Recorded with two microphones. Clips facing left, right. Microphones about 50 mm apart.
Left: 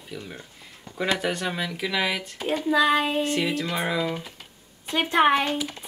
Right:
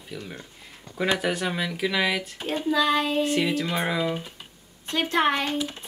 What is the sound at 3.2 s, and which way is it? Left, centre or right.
Speech, centre.